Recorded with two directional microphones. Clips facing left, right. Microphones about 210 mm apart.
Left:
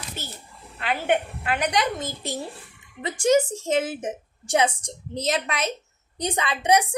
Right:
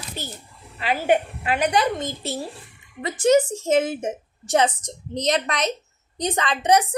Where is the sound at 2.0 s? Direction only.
5° left (ahead or behind).